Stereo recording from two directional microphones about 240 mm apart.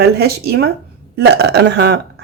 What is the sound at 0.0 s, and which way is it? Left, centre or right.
A woman's voice, right.